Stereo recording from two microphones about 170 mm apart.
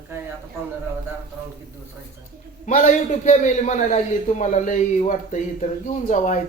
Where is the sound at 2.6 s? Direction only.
45° left (ahead or behind).